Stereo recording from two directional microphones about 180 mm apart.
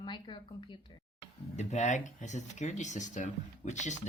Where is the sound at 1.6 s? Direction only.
40° left (ahead or behind).